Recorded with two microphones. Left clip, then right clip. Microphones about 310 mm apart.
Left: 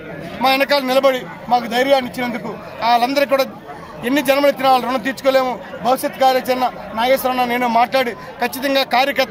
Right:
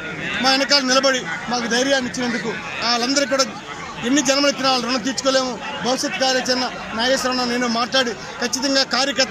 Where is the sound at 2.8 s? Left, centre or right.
Left.